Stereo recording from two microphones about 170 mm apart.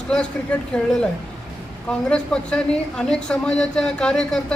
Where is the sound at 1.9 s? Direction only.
5° left (ahead or behind).